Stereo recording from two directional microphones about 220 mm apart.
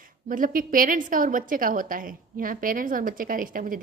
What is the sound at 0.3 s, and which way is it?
A woman's voice, 40° right (ahead or behind).